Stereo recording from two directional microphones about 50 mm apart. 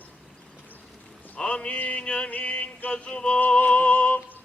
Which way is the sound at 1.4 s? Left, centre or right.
Left.